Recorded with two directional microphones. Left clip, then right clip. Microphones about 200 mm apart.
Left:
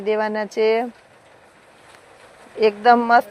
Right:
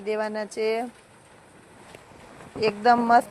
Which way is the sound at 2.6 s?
35° left (ahead or behind).